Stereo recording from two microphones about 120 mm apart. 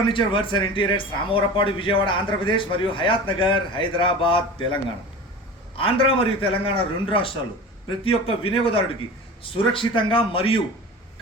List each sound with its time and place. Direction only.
0.1 s a man's voice: 45° left (ahead or behind)